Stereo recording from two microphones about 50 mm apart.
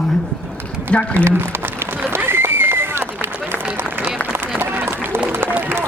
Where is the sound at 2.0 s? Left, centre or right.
Right.